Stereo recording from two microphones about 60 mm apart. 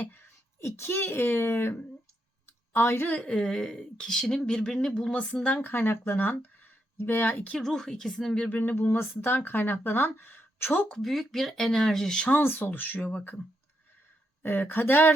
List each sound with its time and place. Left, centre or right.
0.0 s speech: left
2.7 s speech: left
3.2 s speech: centre
5.1 s speech: left
7.5 s speech: centre
8.4 s speech: left
10.9 s speech: centre
12.3 s speech: left
14.4 s speech: left